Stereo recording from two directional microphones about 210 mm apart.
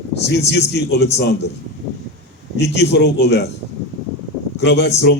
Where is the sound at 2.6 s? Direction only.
55° left (ahead or behind).